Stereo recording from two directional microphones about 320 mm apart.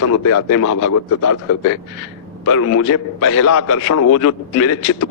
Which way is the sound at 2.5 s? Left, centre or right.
Left.